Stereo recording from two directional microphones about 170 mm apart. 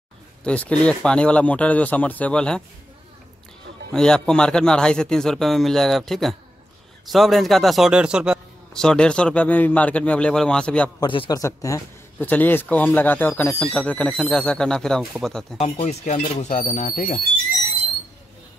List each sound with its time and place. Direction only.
0.4 s a man's voice: 5° left (ahead or behind)
3.9 s a man's voice: 5° left (ahead or behind)
11.0 s a man's voice: 25° left (ahead or behind); by 15.6 s centre (ahead or behind)
15.6 s speech: 35° left (ahead or behind)